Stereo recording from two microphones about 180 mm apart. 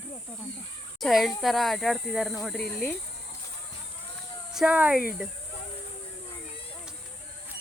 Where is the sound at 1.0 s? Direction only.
Centre (ahead or behind).